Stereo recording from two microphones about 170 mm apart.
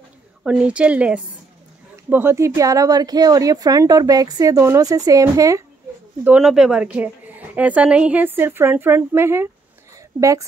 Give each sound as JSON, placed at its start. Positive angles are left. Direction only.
{"t": 0.4, "sound": "a woman's voice", "side_deg": -5}
{"t": 6.2, "sound": "a woman's voice", "side_deg": -5}